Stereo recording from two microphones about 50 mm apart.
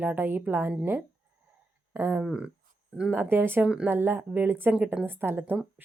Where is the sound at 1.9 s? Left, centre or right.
Right.